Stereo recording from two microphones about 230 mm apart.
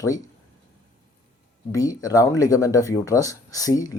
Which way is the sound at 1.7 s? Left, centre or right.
Centre.